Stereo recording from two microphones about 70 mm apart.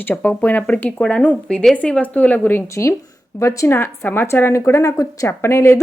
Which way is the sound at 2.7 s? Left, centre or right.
Left.